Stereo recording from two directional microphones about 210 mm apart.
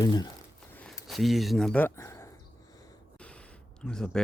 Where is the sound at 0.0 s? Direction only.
20° left (ahead or behind).